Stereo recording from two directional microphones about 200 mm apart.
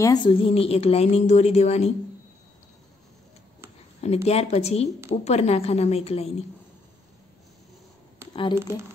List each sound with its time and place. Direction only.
0.0 s a woman's voice: 20° left (ahead or behind)
4.0 s a woman's voice: 30° left (ahead or behind)
8.3 s speech: 25° left (ahead or behind)